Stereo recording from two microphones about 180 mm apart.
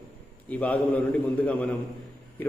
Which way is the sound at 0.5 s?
10° left (ahead or behind).